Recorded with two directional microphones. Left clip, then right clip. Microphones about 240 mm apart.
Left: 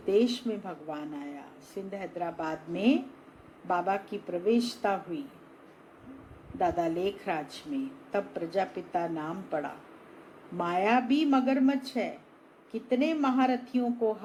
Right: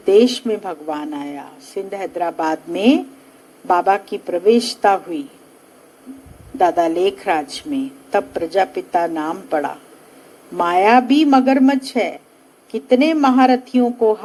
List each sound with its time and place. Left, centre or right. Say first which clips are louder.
0.0 s a woman's voice: right 14 dB; right
6.6 s a woman's voice: right 13 dB; right